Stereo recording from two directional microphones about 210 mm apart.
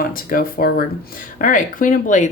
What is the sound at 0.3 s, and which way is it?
Speech, 45° left (ahead or behind).